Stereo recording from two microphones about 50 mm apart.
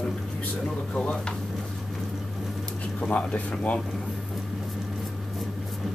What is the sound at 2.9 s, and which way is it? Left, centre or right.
Speech, left.